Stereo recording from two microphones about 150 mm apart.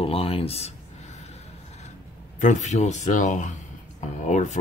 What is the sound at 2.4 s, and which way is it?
Speech, 55° left (ahead or behind).